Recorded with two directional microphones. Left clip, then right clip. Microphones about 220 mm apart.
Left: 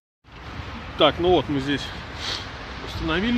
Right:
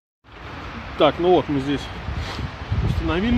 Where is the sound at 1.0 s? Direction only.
5° right (ahead or behind).